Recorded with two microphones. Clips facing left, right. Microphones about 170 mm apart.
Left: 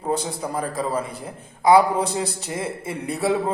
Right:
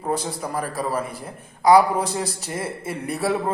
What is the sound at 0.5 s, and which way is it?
A man's voice, 25° left (ahead or behind).